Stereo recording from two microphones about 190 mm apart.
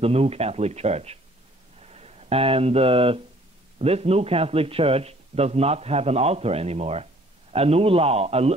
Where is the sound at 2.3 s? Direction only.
30° right (ahead or behind).